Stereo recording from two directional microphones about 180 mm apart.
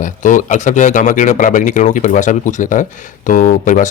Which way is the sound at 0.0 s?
45° left (ahead or behind).